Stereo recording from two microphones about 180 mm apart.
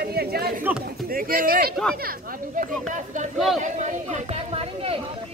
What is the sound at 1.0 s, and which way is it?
Speech, 55° right (ahead or behind).